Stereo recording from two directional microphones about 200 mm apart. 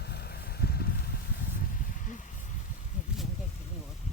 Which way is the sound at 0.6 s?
50° left (ahead or behind).